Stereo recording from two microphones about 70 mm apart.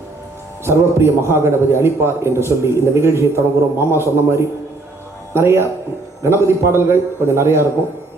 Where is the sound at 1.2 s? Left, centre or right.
Right.